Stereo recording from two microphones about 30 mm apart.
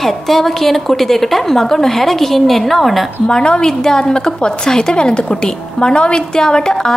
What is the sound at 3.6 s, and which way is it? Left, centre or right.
A woman's voice, centre.